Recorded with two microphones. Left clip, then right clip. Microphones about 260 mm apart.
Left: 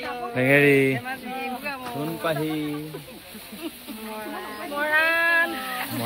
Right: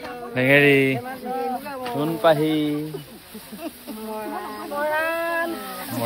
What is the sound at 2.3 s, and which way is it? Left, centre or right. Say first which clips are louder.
Speech: right 6 dB; right.